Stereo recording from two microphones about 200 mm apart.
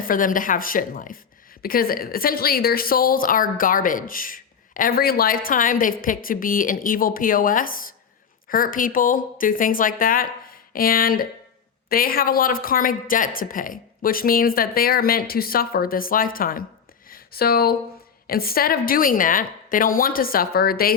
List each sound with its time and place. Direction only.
0.1 s a woman's voice: 45° left (ahead or behind)
17.1 s a sound: 50° left (ahead or behind)
18.3 s a woman's voice: 50° left (ahead or behind)